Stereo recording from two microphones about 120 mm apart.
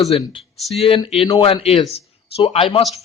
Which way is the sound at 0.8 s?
50° left (ahead or behind).